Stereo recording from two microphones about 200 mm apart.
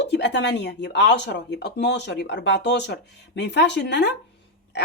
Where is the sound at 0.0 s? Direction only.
60° left (ahead or behind).